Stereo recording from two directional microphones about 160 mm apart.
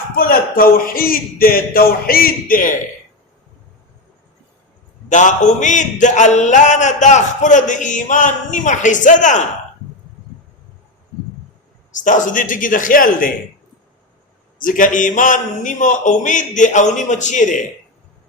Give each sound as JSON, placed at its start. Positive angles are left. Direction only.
{"t": 0.2, "sound": "a man's voice", "side_deg": 65}
{"t": 5.0, "sound": "a man's voice", "side_deg": 50}
{"t": 11.9, "sound": "a man's voice", "side_deg": 50}
{"t": 14.6, "sound": "a man's voice", "side_deg": 55}